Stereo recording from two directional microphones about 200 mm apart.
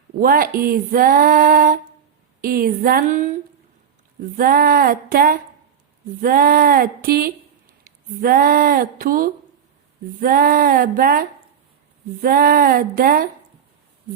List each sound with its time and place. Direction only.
0.2 s female singing: 45° right (ahead or behind)
4.4 s female singing: 45° right (ahead or behind)